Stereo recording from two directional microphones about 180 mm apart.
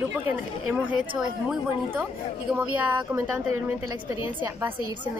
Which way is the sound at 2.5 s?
10° right (ahead or behind).